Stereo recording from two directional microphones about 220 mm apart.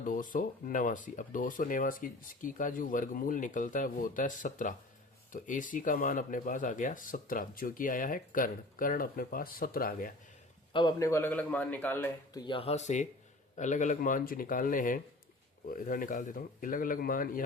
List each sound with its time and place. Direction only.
0.0 s speech: 35° left (ahead or behind)
10.7 s a man's voice: 20° left (ahead or behind); by 17.4 s 40° left (ahead or behind)